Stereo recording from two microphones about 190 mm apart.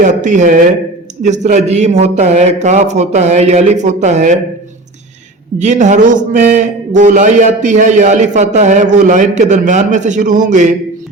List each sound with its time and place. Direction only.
0.0 s a man's voice: 40° right (ahead or behind)
5.5 s a man's voice: 40° right (ahead or behind)